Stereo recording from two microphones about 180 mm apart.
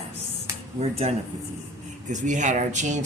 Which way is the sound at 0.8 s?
35° right (ahead or behind).